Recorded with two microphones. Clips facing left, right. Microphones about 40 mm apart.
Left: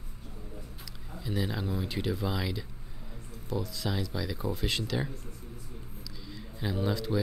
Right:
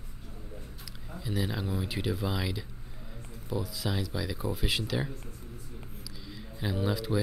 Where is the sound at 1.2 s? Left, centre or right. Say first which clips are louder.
Even; centre.